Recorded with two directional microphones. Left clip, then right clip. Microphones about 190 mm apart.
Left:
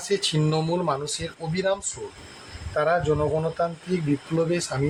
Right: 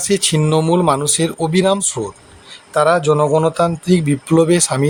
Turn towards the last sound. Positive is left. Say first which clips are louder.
# right 11 dB
turn(degrees=-40)  # may be behind; listen again after turning